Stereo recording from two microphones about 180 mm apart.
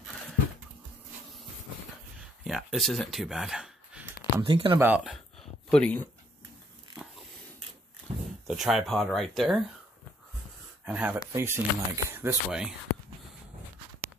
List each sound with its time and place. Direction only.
2.4 s speech: centre (ahead or behind)
4.5 s speech: 30° right (ahead or behind)
4.7 s speech: 10° right (ahead or behind)
5.0 s a sound: 5° left (ahead or behind)
8.1 s a sound: 30° right (ahead or behind)
8.5 s speech: centre (ahead or behind)
10.9 s speech: 5° right (ahead or behind)